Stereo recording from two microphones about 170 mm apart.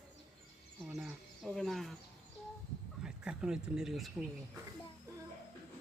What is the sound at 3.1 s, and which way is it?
Speech, 5° right (ahead or behind).